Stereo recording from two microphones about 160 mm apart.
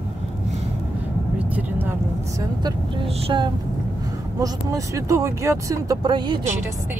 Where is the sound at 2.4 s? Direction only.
30° right (ahead or behind).